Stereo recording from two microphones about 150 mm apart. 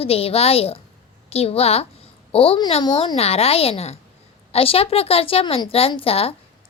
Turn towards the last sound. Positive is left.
turn(degrees=40)  # may be behind; listen again after turning